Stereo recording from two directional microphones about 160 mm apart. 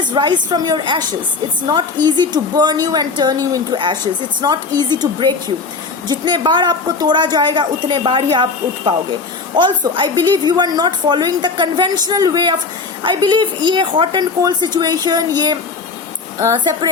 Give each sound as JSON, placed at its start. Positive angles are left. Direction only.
{"t": 0.1, "sound": "a woman's voice", "side_deg": -30}
{"t": 2.0, "sound": "a woman's voice", "side_deg": -25}